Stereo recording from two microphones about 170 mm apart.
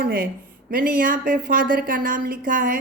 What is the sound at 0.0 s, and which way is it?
Speech, 60° right (ahead or behind).